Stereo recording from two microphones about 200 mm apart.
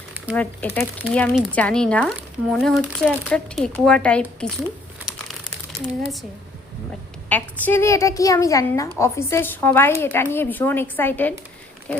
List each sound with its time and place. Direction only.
0.3 s a child's voice: 10° left (ahead or behind)
7.3 s a child's voice: 10° left (ahead or behind)